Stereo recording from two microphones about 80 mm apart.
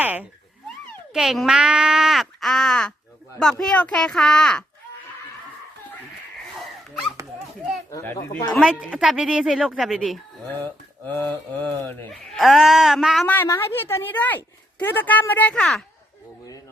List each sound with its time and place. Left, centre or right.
0.0 s cat: right
1.1 s a child's voice: centre
8.6 s a woman's voice: centre
11.0 s a woman's voice: centre
12.3 s a woman's voice: centre
13.2 s a woman's voice: left
15.5 s a child's voice: centre